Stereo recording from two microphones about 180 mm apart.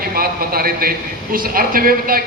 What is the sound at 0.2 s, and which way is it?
A man's voice, 55° right (ahead or behind).